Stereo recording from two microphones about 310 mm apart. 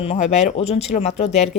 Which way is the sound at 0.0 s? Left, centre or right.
Centre.